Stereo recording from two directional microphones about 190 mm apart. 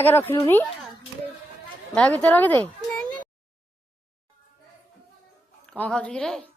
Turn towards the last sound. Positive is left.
turn(degrees=5)  # may be behind; listen again after turning